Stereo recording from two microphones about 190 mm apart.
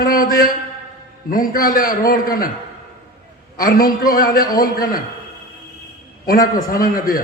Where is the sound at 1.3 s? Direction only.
45° left (ahead or behind).